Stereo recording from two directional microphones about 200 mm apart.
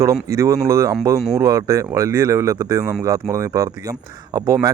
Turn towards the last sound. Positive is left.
turn(degrees=-15)  # may be behind; listen again after turning